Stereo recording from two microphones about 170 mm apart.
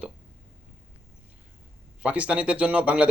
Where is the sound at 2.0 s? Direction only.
5° right (ahead or behind).